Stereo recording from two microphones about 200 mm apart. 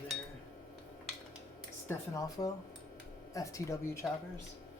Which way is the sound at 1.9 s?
15° left (ahead or behind).